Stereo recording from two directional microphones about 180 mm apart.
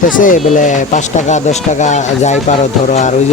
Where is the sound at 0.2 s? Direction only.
45° left (ahead or behind).